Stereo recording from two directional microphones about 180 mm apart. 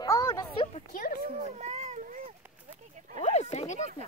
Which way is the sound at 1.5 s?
40° right (ahead or behind).